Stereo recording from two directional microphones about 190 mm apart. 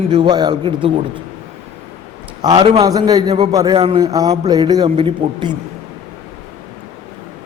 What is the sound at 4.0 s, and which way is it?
A man's voice, 20° right (ahead or behind).